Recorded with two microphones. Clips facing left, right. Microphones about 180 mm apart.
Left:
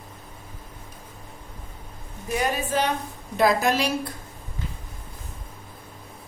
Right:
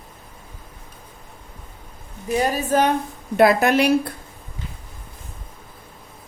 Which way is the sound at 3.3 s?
65° right (ahead or behind).